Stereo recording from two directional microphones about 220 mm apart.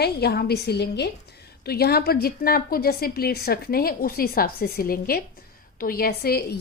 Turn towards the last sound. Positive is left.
turn(degrees=45)  # may be behind; listen again after turning